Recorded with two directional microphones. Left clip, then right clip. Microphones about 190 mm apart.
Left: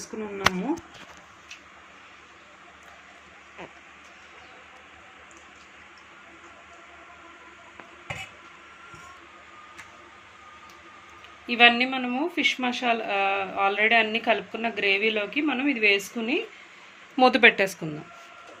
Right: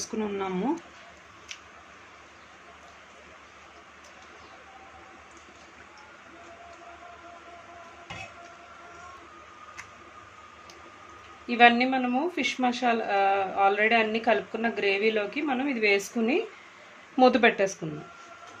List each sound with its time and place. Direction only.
0.1 s speech: 20° right (ahead or behind)
11.4 s speech: 5° right (ahead or behind)
15.9 s speech: 20° right (ahead or behind)
17.2 s speech: 10° right (ahead or behind)